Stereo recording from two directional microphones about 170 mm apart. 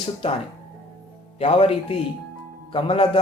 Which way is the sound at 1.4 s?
35° left (ahead or behind).